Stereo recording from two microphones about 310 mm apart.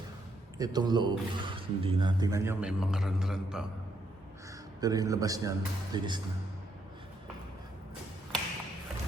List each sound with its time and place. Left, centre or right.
0.6 s speech: centre
4.8 s speech: centre